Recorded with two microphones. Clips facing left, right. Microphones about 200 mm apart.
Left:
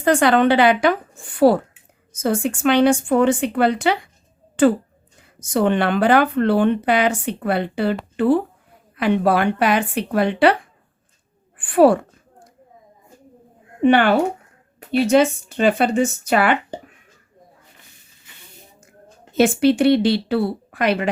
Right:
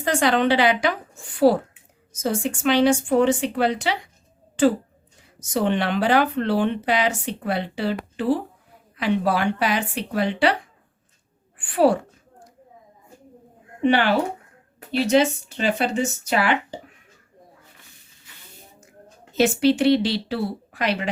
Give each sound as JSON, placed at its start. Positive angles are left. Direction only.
{"t": 0.0, "sound": "speech", "side_deg": 55}
{"t": 5.4, "sound": "speech", "side_deg": 55}
{"t": 11.5, "sound": "speech", "side_deg": 55}
{"t": 13.8, "sound": "speech", "side_deg": 50}
{"t": 19.4, "sound": "speech", "side_deg": 55}